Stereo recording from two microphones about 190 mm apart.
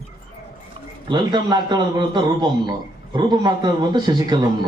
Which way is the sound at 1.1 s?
25° right (ahead or behind).